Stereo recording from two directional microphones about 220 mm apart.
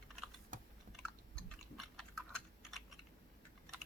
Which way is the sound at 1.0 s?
5° left (ahead or behind).